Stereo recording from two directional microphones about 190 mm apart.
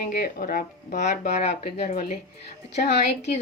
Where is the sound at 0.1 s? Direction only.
45° left (ahead or behind).